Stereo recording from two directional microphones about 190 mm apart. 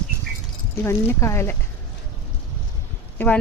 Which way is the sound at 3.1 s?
10° left (ahead or behind).